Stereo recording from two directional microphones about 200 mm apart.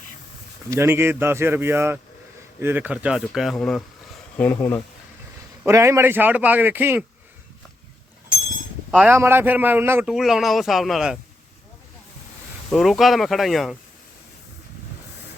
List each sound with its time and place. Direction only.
0.7 s a man's voice: 10° right (ahead or behind); by 4.8 s 10° left (ahead or behind)
5.6 s a man's voice: 15° right (ahead or behind)
9.0 s a man's voice: 10° right (ahead or behind)
12.7 s a man's voice: centre (ahead or behind)